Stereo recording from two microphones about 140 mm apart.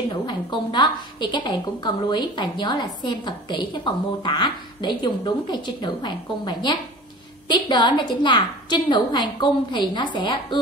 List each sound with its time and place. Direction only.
0.3 s a woman's voice: 30° left (ahead or behind)